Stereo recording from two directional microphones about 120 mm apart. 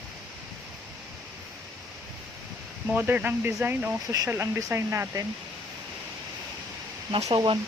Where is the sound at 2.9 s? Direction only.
15° right (ahead or behind).